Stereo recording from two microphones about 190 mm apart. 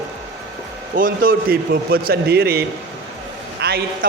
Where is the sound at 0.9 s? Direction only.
50° right (ahead or behind).